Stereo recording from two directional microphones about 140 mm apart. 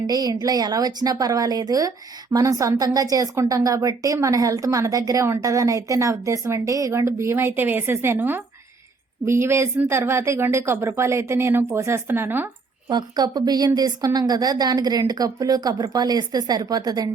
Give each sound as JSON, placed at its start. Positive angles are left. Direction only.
{"t": 0.1, "sound": "a woman's voice", "side_deg": -30}
{"t": 12.9, "sound": "a woman's voice", "side_deg": -30}